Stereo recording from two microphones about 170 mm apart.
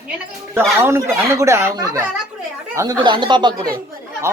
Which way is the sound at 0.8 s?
15° right (ahead or behind).